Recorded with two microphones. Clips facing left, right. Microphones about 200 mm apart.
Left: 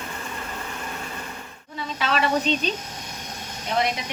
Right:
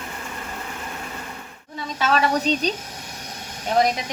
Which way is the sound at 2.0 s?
40° right (ahead or behind).